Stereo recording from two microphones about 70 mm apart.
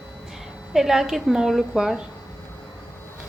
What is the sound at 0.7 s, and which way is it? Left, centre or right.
A woman's voice, centre.